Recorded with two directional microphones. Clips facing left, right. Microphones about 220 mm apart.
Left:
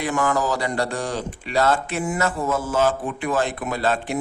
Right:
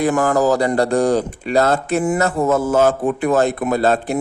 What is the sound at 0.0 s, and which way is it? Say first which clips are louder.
A man's voice: right 7 dB; 40° right (ahead or behind).